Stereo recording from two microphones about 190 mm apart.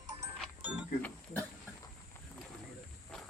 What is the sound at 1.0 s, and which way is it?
Pig, 10° left (ahead or behind).